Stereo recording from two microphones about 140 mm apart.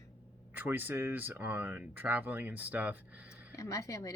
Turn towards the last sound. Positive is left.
turn(degrees=20)  # may be behind; listen again after turning